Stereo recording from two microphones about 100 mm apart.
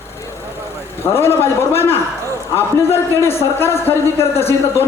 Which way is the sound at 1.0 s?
25° left (ahead or behind).